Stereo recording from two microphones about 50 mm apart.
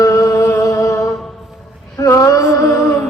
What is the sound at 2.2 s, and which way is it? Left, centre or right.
Music, left.